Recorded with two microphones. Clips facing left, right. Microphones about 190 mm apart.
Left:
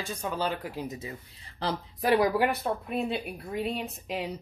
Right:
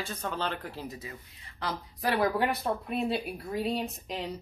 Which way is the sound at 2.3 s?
Centre (ahead or behind).